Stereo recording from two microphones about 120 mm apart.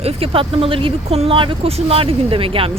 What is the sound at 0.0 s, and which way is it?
Speech, 50° right (ahead or behind).